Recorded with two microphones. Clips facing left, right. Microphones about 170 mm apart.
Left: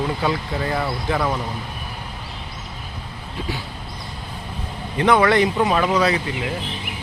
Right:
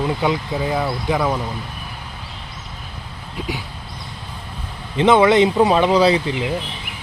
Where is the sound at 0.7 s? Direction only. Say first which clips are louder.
Right 2 dB; centre (ahead or behind).